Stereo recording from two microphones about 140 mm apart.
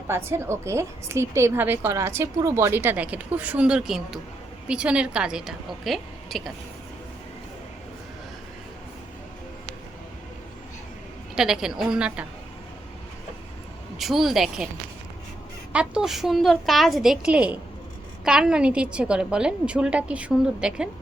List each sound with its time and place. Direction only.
0.1 s a woman's voice: 20° right (ahead or behind); by 6.5 s centre (ahead or behind)
11.3 s a woman's voice: 5° right (ahead or behind)
14.0 s a woman's voice: centre (ahead or behind)
15.7 s a woman's voice: 5° right (ahead or behind)